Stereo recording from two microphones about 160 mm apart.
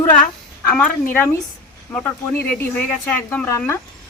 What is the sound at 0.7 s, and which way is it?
Speech, 10° left (ahead or behind).